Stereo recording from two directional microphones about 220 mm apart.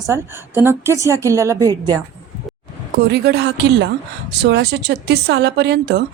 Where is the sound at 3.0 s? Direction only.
45° right (ahead or behind).